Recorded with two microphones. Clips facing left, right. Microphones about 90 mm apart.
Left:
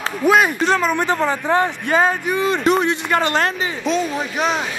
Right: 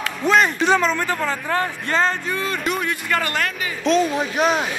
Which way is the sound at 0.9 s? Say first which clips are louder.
Left 4 dB; 20° left (ahead or behind).